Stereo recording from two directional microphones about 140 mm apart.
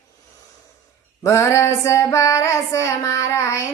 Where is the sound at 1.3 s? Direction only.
20° left (ahead or behind).